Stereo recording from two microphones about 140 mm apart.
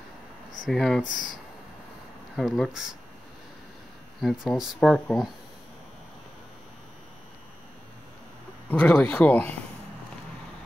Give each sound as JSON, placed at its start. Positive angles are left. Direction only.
{"t": 0.7, "sound": "speech", "side_deg": 0}
{"t": 1.0, "sound": "speech", "side_deg": 70}
{"t": 2.3, "sound": "speech", "side_deg": 0}
{"t": 4.2, "sound": "speech", "side_deg": 0}
{"t": 8.6, "sound": "speech", "side_deg": 10}